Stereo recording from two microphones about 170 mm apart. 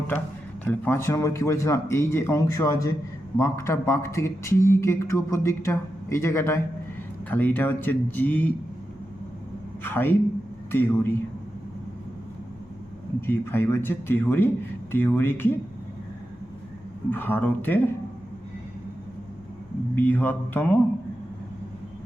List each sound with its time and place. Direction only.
0.6 s speech: 10° left (ahead or behind)
9.8 s speech: 10° left (ahead or behind)
13.2 s speech: 15° left (ahead or behind)
17.1 s speech: 10° left (ahead or behind)
20.0 s speech: 10° left (ahead or behind)